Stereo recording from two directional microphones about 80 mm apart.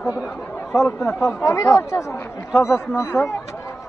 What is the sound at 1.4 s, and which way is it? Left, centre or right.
Speech, left.